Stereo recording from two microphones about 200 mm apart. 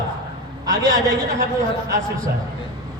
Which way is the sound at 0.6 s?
20° right (ahead or behind).